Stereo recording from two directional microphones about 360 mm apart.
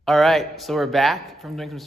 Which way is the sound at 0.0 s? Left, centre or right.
Centre.